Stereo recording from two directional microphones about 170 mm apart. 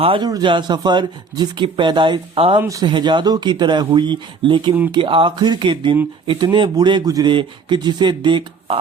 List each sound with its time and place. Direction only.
0.0 s speech: 30° right (ahead or behind)
2.6 s speech: 20° right (ahead or behind)